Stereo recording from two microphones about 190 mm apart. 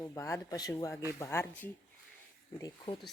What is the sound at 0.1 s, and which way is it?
Speech, 15° left (ahead or behind).